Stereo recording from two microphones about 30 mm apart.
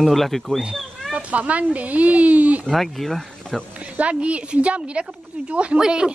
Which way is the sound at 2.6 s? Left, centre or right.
Centre.